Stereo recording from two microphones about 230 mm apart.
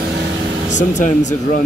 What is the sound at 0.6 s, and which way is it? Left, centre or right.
Speech, left.